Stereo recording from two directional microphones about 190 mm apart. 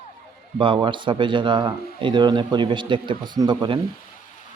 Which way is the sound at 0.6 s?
25° right (ahead or behind).